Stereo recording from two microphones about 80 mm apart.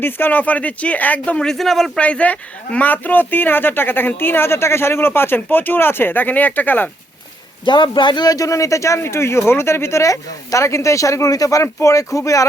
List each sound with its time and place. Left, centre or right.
0.0 s speech: left; by 1.9 s centre
2.0 s speech: centre
7.6 s a man's voice: left